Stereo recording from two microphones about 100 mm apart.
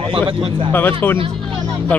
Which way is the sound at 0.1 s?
65° right (ahead or behind).